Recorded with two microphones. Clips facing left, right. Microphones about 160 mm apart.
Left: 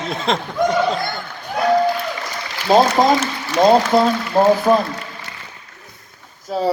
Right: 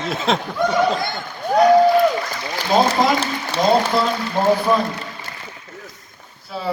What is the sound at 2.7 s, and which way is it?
Speech, 40° left (ahead or behind).